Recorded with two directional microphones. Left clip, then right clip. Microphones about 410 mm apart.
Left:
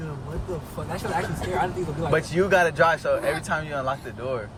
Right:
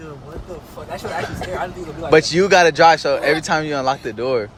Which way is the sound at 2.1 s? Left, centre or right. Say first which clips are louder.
Right 9 dB; centre.